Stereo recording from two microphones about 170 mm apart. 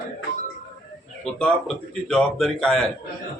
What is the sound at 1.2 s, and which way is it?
Speech, 5° left (ahead or behind).